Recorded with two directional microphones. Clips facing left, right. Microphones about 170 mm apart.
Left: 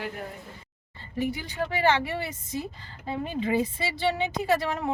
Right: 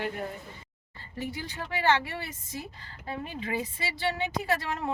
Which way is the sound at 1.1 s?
15° left (ahead or behind).